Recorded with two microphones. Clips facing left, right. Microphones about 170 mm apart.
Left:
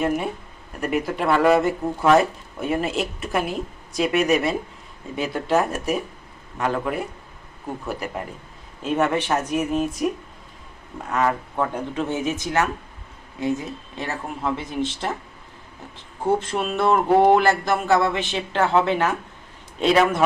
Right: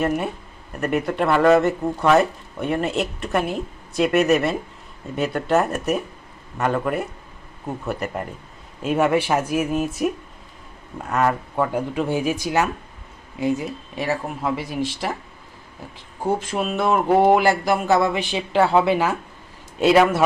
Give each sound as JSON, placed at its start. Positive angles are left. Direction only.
{"t": 0.8, "sound": "speech", "side_deg": 0}
{"t": 11.1, "sound": "speech", "side_deg": -5}
{"t": 12.2, "sound": "speech", "side_deg": 20}
{"t": 13.4, "sound": "speech", "side_deg": -15}
{"t": 16.2, "sound": "speech", "side_deg": -5}